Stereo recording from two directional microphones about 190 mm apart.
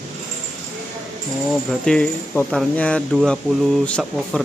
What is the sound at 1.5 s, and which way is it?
Speech, centre (ahead or behind).